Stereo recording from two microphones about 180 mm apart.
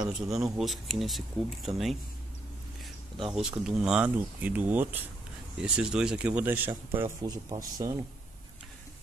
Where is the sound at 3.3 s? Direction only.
5° right (ahead or behind); by 7.9 s 20° right (ahead or behind).